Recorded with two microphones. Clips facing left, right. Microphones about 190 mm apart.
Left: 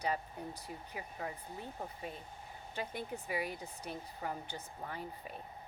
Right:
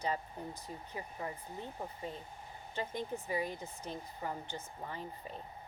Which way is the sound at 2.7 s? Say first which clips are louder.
Right 2 dB; 10° left (ahead or behind).